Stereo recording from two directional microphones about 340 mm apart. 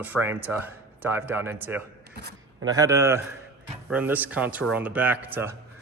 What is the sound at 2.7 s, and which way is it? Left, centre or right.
Speech, centre.